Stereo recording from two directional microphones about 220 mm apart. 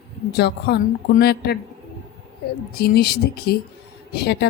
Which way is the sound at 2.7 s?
45° left (ahead or behind).